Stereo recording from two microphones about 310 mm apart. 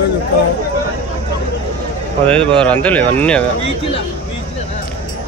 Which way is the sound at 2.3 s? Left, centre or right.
Centre.